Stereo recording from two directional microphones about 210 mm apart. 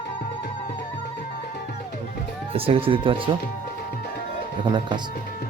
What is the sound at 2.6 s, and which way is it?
Speech, 25° right (ahead or behind).